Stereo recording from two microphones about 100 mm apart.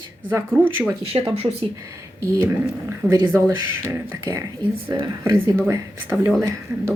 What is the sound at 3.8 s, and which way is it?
Speech, 25° right (ahead or behind).